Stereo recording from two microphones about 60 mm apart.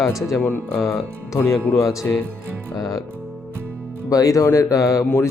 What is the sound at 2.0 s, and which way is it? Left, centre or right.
Speech, left.